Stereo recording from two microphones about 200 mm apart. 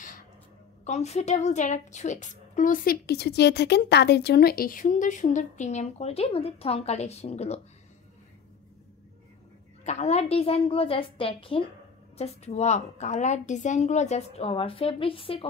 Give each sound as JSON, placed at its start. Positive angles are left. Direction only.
{"t": 0.8, "sound": "a woman's voice", "side_deg": 35}
{"t": 9.8, "sound": "a woman's voice", "side_deg": 35}